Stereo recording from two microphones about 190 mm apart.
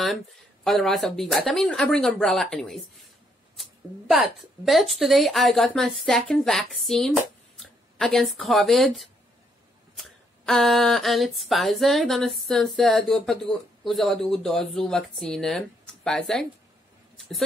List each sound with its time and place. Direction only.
0.7 s speech: centre (ahead or behind)
4.1 s speech: centre (ahead or behind)